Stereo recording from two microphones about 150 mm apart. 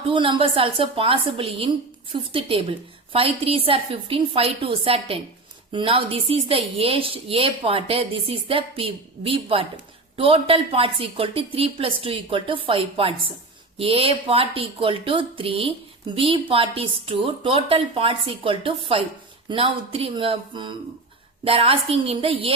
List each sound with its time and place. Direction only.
0.1 s speech: 35° right (ahead or behind)